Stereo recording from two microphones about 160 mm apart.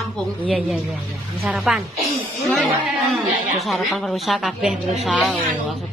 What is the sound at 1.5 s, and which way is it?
Speech, 5° right (ahead or behind).